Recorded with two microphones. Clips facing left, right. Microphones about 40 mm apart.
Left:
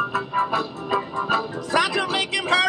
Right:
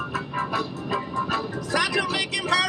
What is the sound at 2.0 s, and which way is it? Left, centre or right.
Vehicle, left.